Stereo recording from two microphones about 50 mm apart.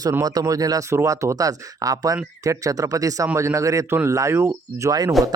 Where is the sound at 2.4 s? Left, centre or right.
Right.